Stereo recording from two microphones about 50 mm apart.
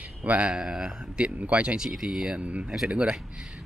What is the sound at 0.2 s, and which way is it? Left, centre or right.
Speech, right.